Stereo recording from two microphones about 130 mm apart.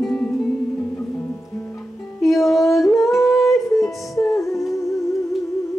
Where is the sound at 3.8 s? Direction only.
25° left (ahead or behind).